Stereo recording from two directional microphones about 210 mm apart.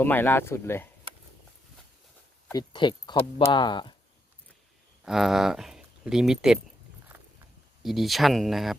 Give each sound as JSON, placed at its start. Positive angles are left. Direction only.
{"t": 0.0, "sound": "speech", "side_deg": 10}
{"t": 2.5, "sound": "speech", "side_deg": 20}
{"t": 5.0, "sound": "speech", "side_deg": 0}
{"t": 7.8, "sound": "speech", "side_deg": 0}